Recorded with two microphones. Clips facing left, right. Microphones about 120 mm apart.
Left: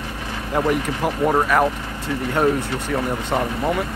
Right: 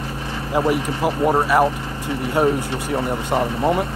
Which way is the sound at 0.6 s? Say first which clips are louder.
Right 1 dB; 10° right (ahead or behind).